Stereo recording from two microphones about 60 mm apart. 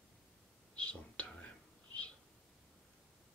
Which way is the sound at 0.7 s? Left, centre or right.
Left.